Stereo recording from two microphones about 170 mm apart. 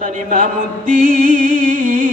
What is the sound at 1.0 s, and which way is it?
Music, 55° right (ahead or behind).